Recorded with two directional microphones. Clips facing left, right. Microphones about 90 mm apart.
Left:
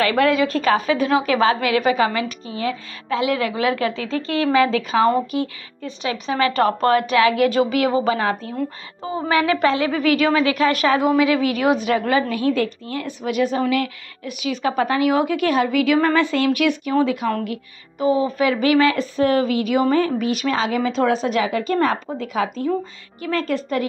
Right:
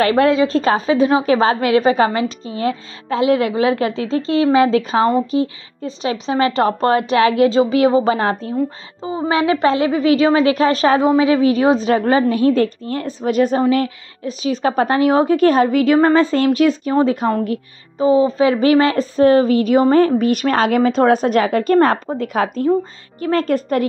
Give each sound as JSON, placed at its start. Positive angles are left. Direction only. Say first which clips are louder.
{"t": 0.0, "sound": "a woman's voice", "louder": "right 4 dB", "side_deg": -30}